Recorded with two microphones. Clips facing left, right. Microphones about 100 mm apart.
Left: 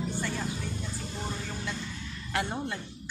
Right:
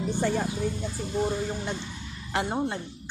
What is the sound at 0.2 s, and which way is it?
Speech, 45° right (ahead or behind).